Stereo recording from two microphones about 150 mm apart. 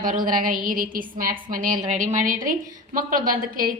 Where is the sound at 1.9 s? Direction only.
60° right (ahead or behind).